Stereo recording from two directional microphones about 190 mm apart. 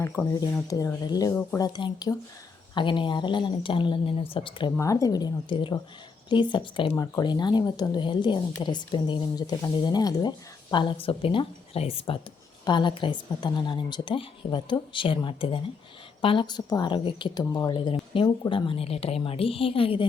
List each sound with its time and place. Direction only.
0.0 s speech: 15° left (ahead or behind)
1.3 s speech: 10° left (ahead or behind)
1.5 s speech: 20° left (ahead or behind)